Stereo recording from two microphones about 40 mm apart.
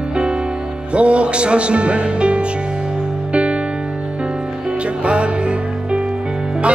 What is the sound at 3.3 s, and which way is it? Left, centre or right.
Music, right.